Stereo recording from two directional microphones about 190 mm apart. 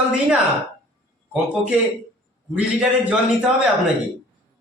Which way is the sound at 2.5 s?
5° right (ahead or behind).